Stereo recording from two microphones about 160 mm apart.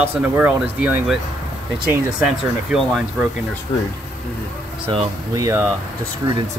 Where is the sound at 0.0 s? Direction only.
10° right (ahead or behind).